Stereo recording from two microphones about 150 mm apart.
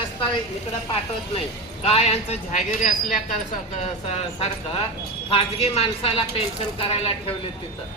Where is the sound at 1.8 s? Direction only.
45° left (ahead or behind).